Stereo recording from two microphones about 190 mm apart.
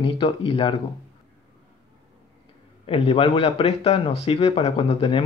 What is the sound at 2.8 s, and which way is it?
A man's voice, 30° left (ahead or behind).